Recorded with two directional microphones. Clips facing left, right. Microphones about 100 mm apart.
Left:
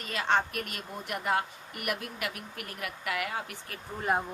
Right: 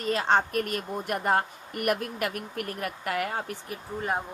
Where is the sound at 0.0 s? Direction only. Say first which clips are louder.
Right 4 dB; 35° right (ahead or behind).